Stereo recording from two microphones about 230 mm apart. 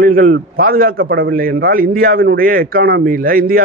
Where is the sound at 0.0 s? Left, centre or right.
Right.